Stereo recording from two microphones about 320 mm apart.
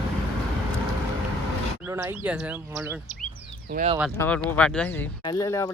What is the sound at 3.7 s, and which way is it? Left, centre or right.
Speech, right.